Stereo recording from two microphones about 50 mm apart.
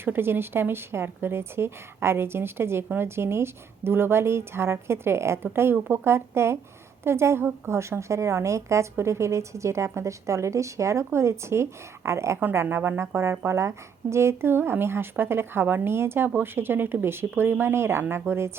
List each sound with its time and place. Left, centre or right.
0.0 s a woman's voice: right
12.6 s a woman's voice: right